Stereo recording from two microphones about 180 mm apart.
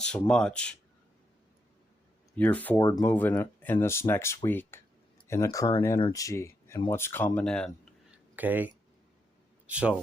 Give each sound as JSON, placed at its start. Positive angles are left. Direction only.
{"t": 0.0, "sound": "speech", "side_deg": 5}
{"t": 2.3, "sound": "speech", "side_deg": 10}
{"t": 2.8, "sound": "speech", "side_deg": 20}
{"t": 3.1, "sound": "speech", "side_deg": 10}
{"t": 8.4, "sound": "a man's voice", "side_deg": -10}